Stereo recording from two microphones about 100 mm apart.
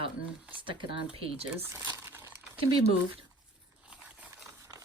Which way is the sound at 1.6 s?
25° right (ahead or behind).